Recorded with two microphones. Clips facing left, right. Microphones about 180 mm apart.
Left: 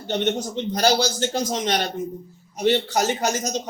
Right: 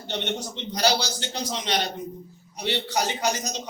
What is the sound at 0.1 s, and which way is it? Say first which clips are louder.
A man's voice: left 7 dB; 45° left (ahead or behind).